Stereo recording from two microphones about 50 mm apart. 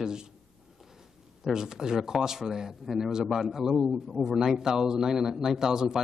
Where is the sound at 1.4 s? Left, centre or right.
Centre.